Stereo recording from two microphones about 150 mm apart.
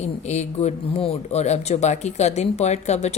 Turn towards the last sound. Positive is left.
turn(degrees=50)  # may be behind; listen again after turning